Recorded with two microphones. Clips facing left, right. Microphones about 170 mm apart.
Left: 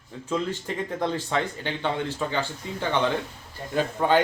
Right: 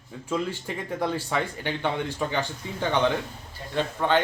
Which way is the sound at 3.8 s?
10° left (ahead or behind).